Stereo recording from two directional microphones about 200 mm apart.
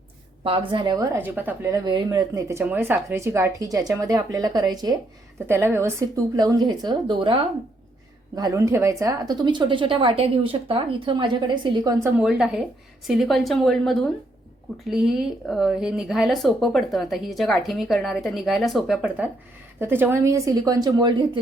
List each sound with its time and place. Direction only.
0.4 s a woman's voice: 25° right (ahead or behind)
12.1 s a woman's voice: 5° right (ahead or behind); by 21.2 s 20° right (ahead or behind)